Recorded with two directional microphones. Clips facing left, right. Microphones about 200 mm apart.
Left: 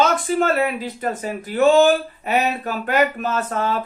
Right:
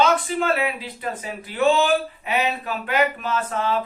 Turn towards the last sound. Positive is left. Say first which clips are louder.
# left 2 dB
turn(degrees=45)  # may be behind; listen again after turning